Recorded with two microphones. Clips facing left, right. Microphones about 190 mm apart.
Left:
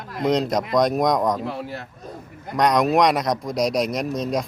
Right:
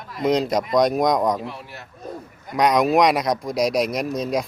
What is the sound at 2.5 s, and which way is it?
A man's voice, centre (ahead or behind).